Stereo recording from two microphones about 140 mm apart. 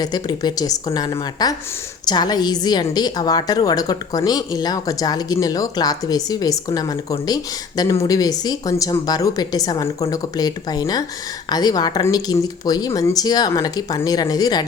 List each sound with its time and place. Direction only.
0.0 s a woman's voice: 30° left (ahead or behind)